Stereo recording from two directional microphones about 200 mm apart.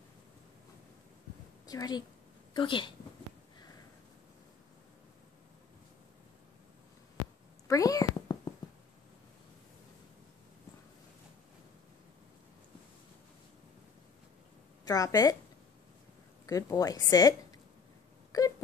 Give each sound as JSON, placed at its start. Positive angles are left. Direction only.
{"t": 1.7, "sound": "a woman's voice", "side_deg": 20}
{"t": 7.6, "sound": "a sound", "side_deg": 15}
{"t": 14.9, "sound": "a woman's voice", "side_deg": 20}
{"t": 16.4, "sound": "a woman's voice", "side_deg": 15}